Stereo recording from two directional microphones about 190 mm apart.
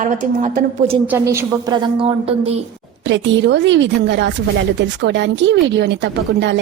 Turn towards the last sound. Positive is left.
turn(degrees=-65)  # may be behind; listen again after turning